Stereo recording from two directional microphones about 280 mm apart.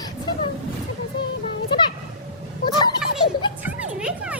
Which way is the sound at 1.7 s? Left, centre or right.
Centre.